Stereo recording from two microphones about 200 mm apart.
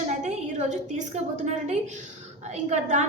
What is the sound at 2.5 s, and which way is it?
Speech, 35° right (ahead or behind).